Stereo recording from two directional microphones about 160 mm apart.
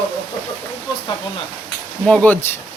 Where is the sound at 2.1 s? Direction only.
10° left (ahead or behind).